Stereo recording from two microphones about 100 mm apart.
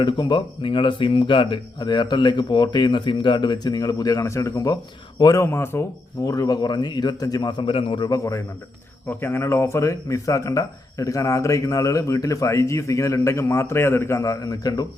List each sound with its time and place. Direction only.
0.0 s speech: 50° left (ahead or behind)
5.5 s speech: 25° left (ahead or behind)
6.2 s speech: 40° left (ahead or behind); by 8.1 s 55° left (ahead or behind)
8.1 s speech: 30° left (ahead or behind)